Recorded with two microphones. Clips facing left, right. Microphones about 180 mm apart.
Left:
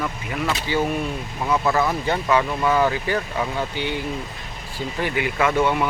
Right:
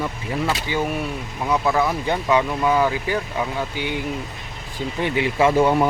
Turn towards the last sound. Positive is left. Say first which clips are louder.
# right 3 dB
turn(degrees=-35)  # may be behind; listen again after turning